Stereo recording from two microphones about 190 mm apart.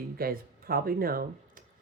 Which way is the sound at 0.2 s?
50° right (ahead or behind).